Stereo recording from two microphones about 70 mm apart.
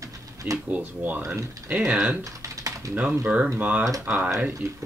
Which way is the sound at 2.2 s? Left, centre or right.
Right.